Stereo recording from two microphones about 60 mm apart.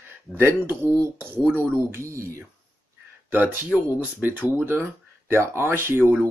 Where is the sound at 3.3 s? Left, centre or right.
Right.